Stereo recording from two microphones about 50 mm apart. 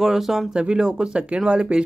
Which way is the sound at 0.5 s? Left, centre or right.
Centre.